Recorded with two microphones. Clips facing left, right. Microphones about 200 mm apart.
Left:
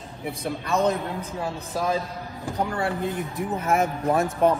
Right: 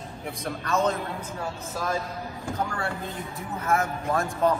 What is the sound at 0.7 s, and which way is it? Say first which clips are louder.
A man's voice: left 2 dB; 15° left (ahead or behind).